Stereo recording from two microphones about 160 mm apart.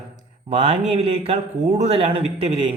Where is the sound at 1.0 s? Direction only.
40° right (ahead or behind).